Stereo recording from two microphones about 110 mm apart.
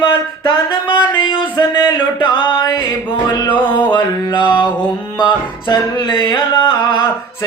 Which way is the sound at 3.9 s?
45° left (ahead or behind).